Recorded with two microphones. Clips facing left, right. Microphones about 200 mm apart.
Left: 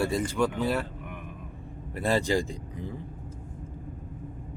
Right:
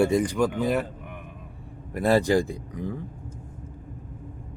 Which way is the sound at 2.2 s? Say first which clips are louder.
Right 5 dB; 15° left (ahead or behind).